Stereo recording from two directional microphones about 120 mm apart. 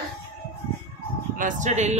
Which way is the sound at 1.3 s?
90° right.